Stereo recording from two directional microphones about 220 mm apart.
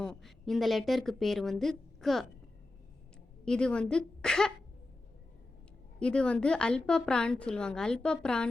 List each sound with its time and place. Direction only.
0.0 s a woman's voice: centre (ahead or behind)
3.4 s a woman's voice: 5° left (ahead or behind)
6.0 s a woman's voice: 5° left (ahead or behind)